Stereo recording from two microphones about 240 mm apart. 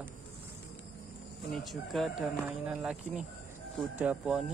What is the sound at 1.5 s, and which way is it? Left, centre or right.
Speech, centre.